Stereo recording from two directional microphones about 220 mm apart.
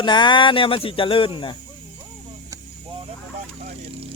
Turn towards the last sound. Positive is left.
turn(degrees=-25)  # may be behind; listen again after turning